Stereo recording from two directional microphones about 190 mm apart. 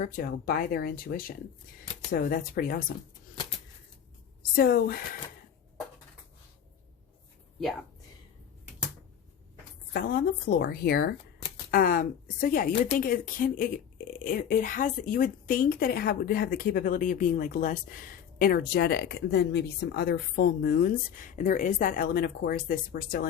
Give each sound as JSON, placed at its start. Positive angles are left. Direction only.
{"t": 0.0, "sound": "speech", "side_deg": 50}
{"t": 4.5, "sound": "speech", "side_deg": 55}
{"t": 9.9, "sound": "speech", "side_deg": 50}